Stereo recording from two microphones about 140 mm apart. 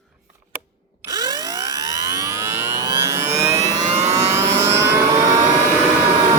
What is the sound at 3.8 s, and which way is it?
Vehicle, 55° right (ahead or behind).